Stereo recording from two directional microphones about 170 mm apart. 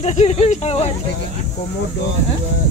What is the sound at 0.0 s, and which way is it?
Speech, 40° left (ahead or behind).